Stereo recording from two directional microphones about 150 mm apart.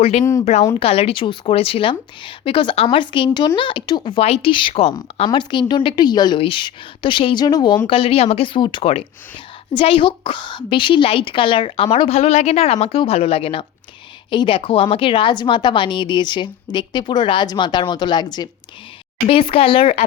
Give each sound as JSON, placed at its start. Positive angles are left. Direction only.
{"t": 0.0, "sound": "a woman's voice", "side_deg": 45}